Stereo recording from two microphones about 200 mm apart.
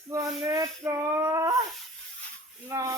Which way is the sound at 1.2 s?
15° right (ahead or behind).